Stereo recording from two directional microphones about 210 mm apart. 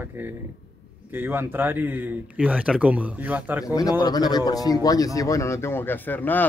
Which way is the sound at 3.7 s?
20° left (ahead or behind).